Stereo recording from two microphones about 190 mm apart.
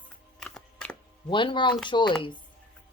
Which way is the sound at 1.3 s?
25° left (ahead or behind).